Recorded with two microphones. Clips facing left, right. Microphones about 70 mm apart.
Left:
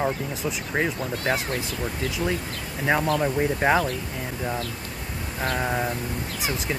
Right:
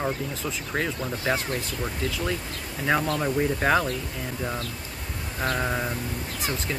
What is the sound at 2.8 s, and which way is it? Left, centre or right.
Speech, centre.